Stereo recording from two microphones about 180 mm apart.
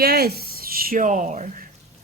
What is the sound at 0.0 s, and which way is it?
Speech, 60° right (ahead or behind).